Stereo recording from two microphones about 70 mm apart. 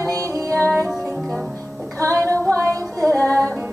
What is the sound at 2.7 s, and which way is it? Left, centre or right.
Music, right.